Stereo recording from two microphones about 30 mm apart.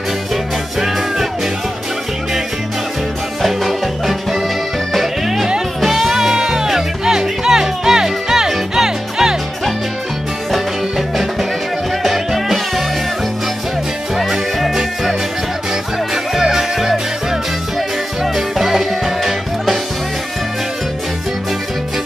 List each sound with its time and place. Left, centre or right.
3.4 s music: centre
5.8 s music: centre
10.5 s music: centre
16.3 s music: centre